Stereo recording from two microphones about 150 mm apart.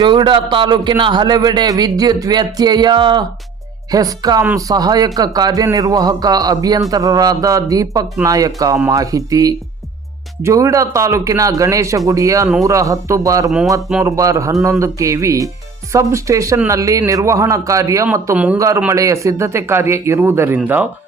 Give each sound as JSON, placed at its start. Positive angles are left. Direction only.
{"t": 0.0, "sound": "a man's voice", "side_deg": -30}
{"t": 18.1, "sound": "speech", "side_deg": -10}
{"t": 18.9, "sound": "a man's voice", "side_deg": -20}